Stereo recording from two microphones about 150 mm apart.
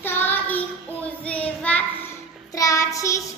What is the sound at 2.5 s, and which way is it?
Child singing, 20° left (ahead or behind).